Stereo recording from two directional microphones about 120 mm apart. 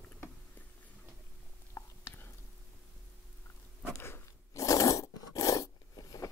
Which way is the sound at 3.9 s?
20° left (ahead or behind).